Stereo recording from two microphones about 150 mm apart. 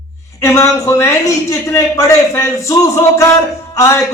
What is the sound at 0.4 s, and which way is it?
A man's voice, 20° left (ahead or behind).